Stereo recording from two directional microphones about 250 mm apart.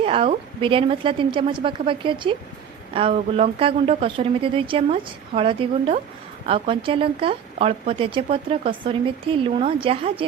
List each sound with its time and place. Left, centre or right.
0.0 s speech: right